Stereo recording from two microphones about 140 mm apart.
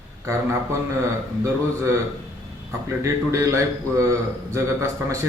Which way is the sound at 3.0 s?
20° right (ahead or behind).